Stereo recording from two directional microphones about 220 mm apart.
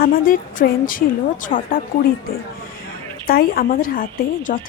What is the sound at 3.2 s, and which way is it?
A woman's voice, 45° left (ahead or behind).